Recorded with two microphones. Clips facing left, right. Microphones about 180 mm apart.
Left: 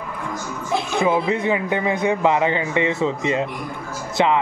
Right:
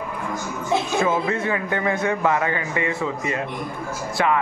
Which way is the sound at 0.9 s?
15° left (ahead or behind).